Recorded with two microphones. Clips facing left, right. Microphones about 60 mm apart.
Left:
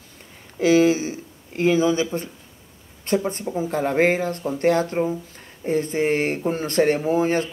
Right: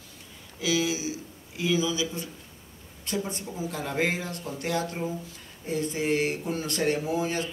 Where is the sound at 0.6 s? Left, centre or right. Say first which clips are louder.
Left 11 dB; left.